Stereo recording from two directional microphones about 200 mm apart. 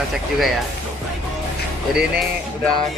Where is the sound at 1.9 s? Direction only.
5° right (ahead or behind).